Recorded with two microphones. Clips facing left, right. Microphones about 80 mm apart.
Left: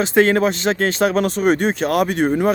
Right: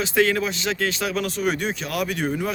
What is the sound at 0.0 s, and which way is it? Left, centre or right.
Speech, left.